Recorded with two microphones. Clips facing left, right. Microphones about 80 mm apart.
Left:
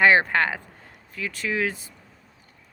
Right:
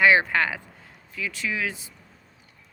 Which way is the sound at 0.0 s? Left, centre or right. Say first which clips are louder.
Left 1 dB; left.